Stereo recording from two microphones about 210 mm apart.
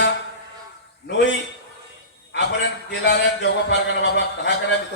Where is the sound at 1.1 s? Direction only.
60° left (ahead or behind).